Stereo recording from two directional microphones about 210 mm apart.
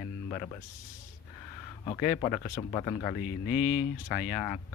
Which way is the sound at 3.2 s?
40° left (ahead or behind).